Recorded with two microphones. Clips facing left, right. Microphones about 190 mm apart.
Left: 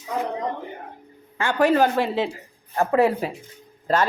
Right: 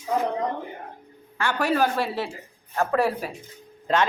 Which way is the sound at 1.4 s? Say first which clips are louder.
Left 4 dB; 20° left (ahead or behind).